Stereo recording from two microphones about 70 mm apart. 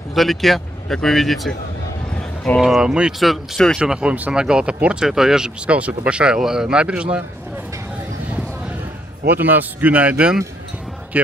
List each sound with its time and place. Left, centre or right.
0.1 s speech: centre
2.6 s speech: centre
3.2 s speech: centre
3.8 s speech: centre
9.3 s speech: right